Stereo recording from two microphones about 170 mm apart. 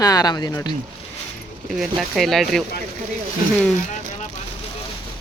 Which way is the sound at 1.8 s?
Centre (ahead or behind).